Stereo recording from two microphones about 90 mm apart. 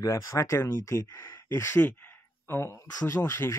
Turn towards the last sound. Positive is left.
turn(degrees=30)  # may be behind; listen again after turning